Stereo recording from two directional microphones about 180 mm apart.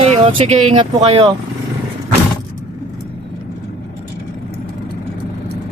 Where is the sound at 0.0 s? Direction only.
35° right (ahead or behind).